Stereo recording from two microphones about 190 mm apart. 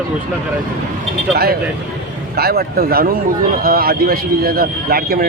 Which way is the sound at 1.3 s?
55° right (ahead or behind).